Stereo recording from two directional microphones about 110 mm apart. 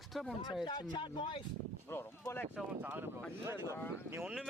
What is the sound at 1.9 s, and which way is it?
Speech, 20° left (ahead or behind).